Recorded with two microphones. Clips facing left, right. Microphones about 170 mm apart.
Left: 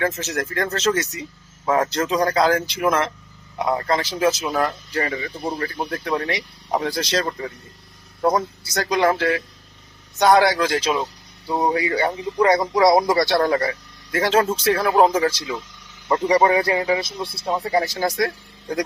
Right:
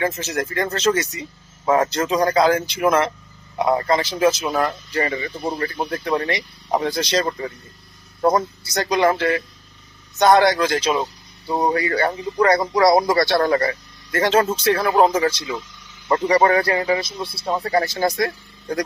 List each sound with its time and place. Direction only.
0.0 s a man's voice: centre (ahead or behind)
16.3 s speech: 15° left (ahead or behind)